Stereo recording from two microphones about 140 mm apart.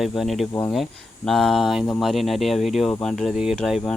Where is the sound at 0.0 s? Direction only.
Centre (ahead or behind).